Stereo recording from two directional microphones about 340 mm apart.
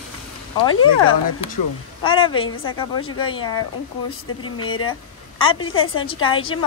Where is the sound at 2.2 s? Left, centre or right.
Centre.